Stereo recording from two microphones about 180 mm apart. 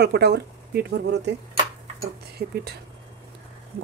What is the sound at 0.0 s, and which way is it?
A woman's voice, 65° right (ahead or behind).